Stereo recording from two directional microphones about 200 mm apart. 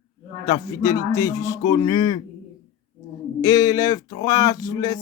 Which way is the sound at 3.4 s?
20° left (ahead or behind).